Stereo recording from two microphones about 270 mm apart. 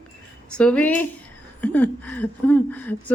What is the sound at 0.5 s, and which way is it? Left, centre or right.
A woman's voice, centre.